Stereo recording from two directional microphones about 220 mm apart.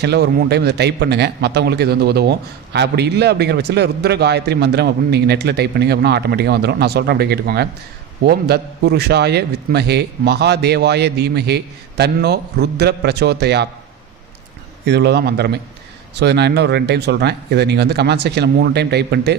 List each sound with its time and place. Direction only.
0.0 s a man's voice: 50° right (ahead or behind)
14.8 s a man's voice: 50° right (ahead or behind)